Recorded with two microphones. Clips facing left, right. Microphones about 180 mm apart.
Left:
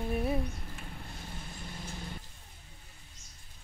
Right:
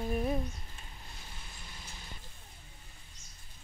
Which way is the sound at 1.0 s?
50° left (ahead or behind).